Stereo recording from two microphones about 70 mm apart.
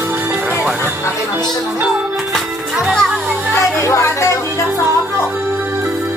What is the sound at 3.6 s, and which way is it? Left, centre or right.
Speech, left.